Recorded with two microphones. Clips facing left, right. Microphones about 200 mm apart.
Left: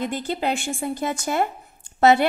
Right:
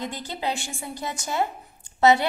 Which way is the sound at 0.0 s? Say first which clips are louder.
Left 5 dB; 55° left (ahead or behind).